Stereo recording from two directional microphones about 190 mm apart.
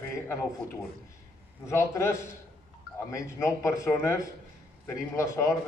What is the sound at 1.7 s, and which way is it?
A man's voice, 15° left (ahead or behind).